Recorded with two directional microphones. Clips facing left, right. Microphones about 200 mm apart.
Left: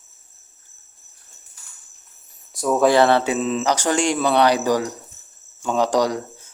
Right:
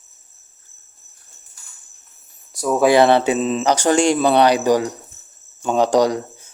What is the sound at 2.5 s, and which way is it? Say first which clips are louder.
Speech: right 1 dB; centre (ahead or behind).